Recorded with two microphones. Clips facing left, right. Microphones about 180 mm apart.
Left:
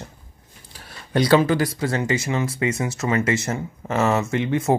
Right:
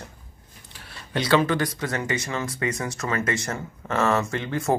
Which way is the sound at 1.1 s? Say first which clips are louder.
Left 4 dB; 40° left (ahead or behind).